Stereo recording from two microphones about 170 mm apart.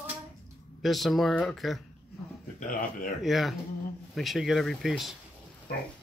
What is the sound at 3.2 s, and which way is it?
Speech, centre (ahead or behind).